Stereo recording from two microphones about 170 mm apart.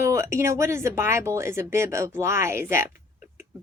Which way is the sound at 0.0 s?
15° right (ahead or behind).